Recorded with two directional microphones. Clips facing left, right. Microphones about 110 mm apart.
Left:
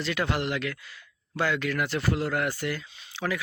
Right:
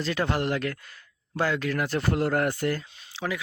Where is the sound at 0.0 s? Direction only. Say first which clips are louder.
Right 2 dB; 35° right (ahead or behind).